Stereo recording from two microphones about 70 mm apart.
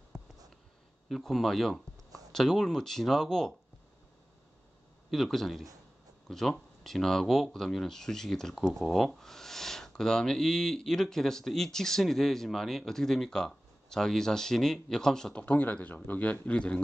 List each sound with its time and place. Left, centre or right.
0.1 s a sound: centre
1.0 s speech: centre
5.1 s speech: centre
15.4 s speech: left